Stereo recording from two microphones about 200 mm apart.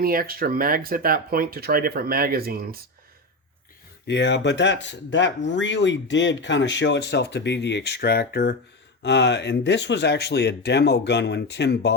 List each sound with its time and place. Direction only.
0.0 s speech: 45° right (ahead or behind)
4.0 s speech: 60° left (ahead or behind)